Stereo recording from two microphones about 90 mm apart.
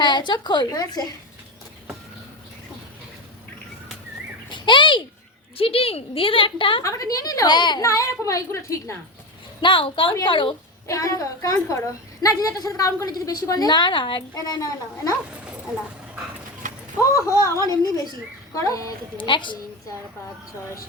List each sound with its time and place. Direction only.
0.0 s a woman's voice: 55° left (ahead or behind)
4.4 s bird: 60° left (ahead or behind)
5.5 s a woman's voice: 90° left; by 6.8 s 75° left (ahead or behind)
6.8 s a woman's voice: 40° left (ahead or behind); by 7.8 s 55° left (ahead or behind)
7.8 s a woman's voice: 35° left (ahead or behind)
9.6 s a woman's voice: 65° left (ahead or behind); by 10.2 s 85° left
10.2 s a woman's voice: 65° left (ahead or behind)
10.8 s a woman's voice: 40° left (ahead or behind)
17.0 s a woman's voice: 35° left (ahead or behind)
19.1 s a woman's voice: 60° left (ahead or behind)